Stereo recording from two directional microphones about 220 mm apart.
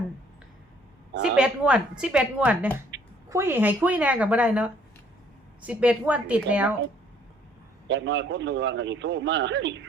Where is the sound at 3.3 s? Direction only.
10° right (ahead or behind).